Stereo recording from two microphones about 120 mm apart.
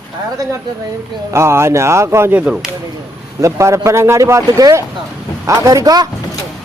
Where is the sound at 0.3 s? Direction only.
30° right (ahead or behind); by 2.6 s 10° right (ahead or behind).